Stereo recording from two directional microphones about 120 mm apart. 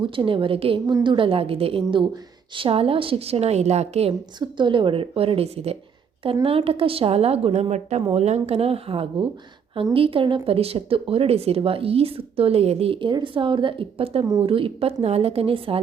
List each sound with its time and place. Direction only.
0.0 s a woman's voice: 45° right (ahead or behind); by 4.1 s 65° right (ahead or behind)
4.4 s a woman's voice: 40° right (ahead or behind)